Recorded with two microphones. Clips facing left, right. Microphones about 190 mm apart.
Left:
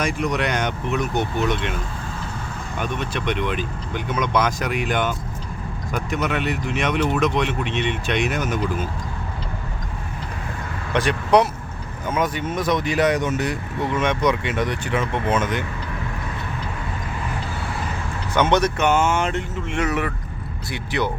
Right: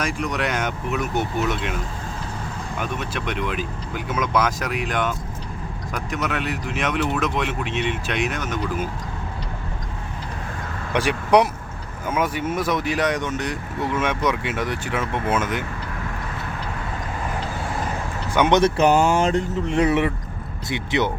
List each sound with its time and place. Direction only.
0.0 s speech: centre (ahead or behind)
2.7 s speech: 5° right (ahead or behind)
10.9 s speech: 10° right (ahead or behind)
18.3 s speech: 15° right (ahead or behind)
18.6 s speech: 35° right (ahead or behind)